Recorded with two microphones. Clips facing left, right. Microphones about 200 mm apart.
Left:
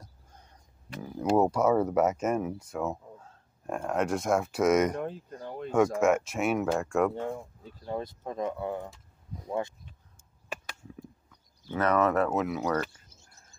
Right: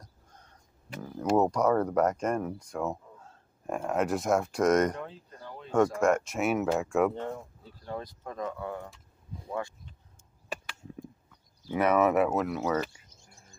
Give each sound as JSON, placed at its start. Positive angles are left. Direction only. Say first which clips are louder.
{"t": 0.0, "sound": "a sound", "louder": "left 1 dB", "side_deg": 10}
{"t": 1.0, "sound": "speech", "louder": "left 1 dB", "side_deg": 10}
{"t": 5.0, "sound": "speech", "louder": "left 7 dB", "side_deg": 50}
{"t": 5.9, "sound": "speech", "louder": "left 1 dB", "side_deg": 5}
{"t": 7.2, "sound": "speech", "louder": "left 2 dB", "side_deg": 10}
{"t": 7.8, "sound": "speech", "louder": "left 3 dB", "side_deg": 25}
{"t": 11.7, "sound": "speech", "louder": "right 1 dB", "side_deg": -10}